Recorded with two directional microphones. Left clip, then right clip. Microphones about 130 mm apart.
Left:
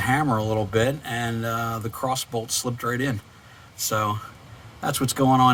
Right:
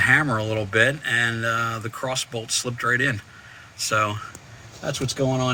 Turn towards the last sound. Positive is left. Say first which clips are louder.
# left 2 dB
turn(degrees=30)  # may be behind; listen again after turning